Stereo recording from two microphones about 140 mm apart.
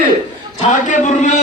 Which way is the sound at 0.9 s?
65° left (ahead or behind).